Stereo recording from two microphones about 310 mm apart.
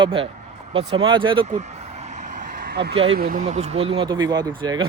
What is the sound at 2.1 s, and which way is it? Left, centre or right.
Vehicle, right.